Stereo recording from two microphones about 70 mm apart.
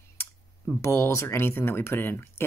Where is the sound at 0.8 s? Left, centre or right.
Left.